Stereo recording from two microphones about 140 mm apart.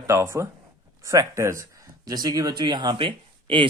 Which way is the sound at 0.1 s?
20° right (ahead or behind).